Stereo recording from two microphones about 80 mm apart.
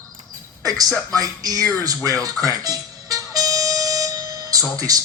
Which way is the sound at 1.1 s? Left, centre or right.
Right.